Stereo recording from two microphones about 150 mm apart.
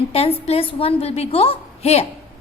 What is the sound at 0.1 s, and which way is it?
A woman's voice, 40° left (ahead or behind).